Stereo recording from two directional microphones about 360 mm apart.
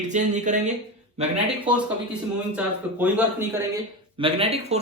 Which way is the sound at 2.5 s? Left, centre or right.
Centre.